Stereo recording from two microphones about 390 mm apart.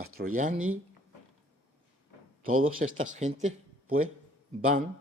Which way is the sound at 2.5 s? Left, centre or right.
Right.